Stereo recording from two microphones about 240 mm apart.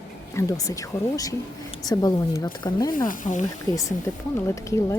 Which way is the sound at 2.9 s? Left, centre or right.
Left.